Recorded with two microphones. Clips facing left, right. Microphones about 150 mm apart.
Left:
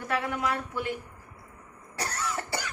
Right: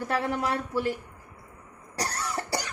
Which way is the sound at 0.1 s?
35° right (ahead or behind).